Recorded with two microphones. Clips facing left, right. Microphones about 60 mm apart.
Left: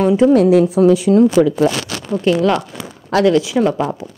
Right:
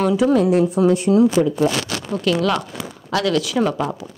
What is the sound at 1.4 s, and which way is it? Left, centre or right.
Speech, left.